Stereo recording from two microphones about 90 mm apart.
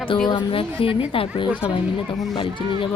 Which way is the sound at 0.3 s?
70° left (ahead or behind).